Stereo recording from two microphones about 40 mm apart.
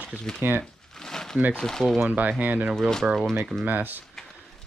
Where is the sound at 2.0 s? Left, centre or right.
Right.